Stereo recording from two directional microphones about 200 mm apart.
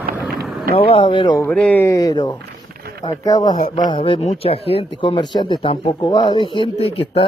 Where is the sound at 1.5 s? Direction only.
5° left (ahead or behind).